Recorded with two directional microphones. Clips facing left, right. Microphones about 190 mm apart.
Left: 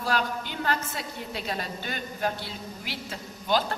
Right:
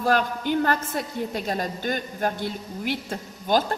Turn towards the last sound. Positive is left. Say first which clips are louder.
# right 4 dB
turn(degrees=-45)  # may be behind; listen again after turning